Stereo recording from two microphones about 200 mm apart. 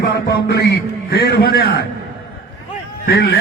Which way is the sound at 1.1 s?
55° left (ahead or behind).